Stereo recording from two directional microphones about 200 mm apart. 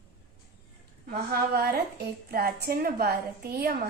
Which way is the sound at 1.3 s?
50° right (ahead or behind).